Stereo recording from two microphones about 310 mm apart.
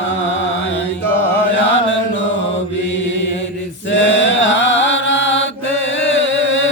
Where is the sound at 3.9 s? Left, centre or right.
Left.